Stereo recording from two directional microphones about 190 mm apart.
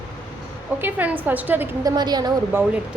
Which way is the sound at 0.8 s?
10° right (ahead or behind).